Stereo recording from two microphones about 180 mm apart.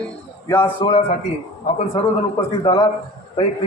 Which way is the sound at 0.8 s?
35° left (ahead or behind).